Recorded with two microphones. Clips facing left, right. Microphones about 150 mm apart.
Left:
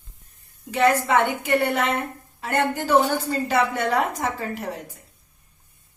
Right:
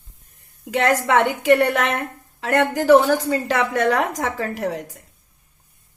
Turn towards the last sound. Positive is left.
turn(degrees=-85)